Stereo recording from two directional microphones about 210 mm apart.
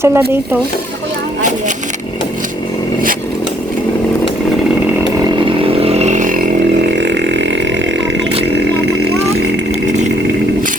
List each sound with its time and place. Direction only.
0.0 s speech: 10° right (ahead or behind)
5.5 s vehicle: 25° right (ahead or behind)
6.9 s burping: 55° right (ahead or behind)